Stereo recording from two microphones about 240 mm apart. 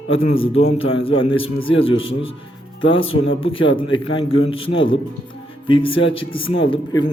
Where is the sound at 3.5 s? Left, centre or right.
Left.